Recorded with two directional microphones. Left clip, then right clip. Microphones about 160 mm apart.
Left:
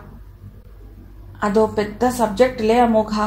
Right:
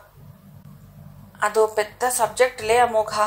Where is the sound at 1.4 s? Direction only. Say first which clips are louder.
Left 2 dB; 50° right (ahead or behind).